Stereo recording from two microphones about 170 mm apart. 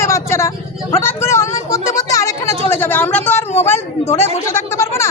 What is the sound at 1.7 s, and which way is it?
Music, 20° left (ahead or behind).